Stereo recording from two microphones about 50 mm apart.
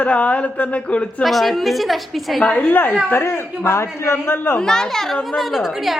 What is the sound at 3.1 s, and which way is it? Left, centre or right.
A man's voice, left.